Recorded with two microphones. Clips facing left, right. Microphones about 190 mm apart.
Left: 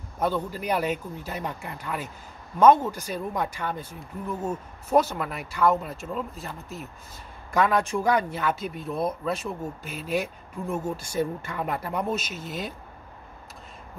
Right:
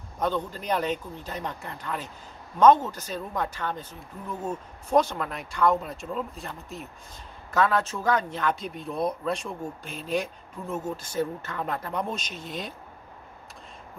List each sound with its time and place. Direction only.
0.2 s speech: 10° left (ahead or behind)
7.5 s speech: 15° left (ahead or behind)